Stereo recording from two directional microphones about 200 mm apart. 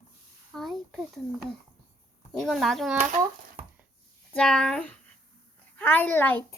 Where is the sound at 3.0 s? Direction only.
30° right (ahead or behind).